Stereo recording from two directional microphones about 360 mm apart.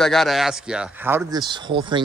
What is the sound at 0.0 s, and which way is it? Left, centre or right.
Speech, centre.